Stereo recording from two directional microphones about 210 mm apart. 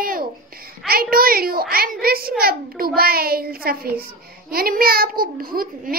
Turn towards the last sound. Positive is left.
turn(degrees=-45)  # may be behind; listen again after turning